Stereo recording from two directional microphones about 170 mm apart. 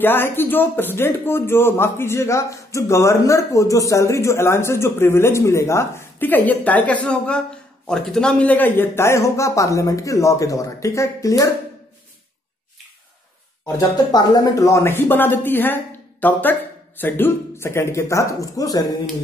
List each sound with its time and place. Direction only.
0.0 s speech: 10° left (ahead or behind)
13.7 s speech: 20° left (ahead or behind)